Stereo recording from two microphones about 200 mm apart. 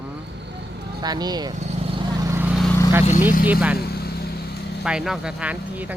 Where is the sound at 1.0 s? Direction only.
20° right (ahead or behind).